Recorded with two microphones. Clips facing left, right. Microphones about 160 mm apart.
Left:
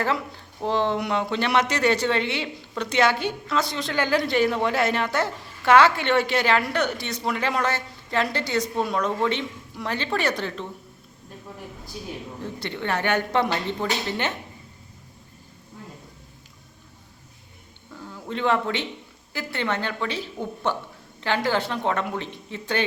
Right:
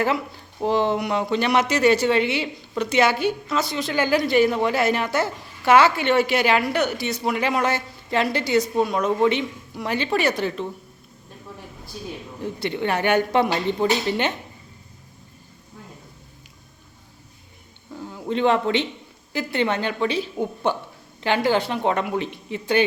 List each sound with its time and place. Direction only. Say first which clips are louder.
0.6 s a woman's voice: right 3 dB; 10° right (ahead or behind)
12.4 s a woman's voice: right 7 dB; 15° right (ahead or behind)
17.9 s a sound: right 6 dB; 20° right (ahead or behind)
19.3 s a woman's voice: right 5 dB; 20° right (ahead or behind)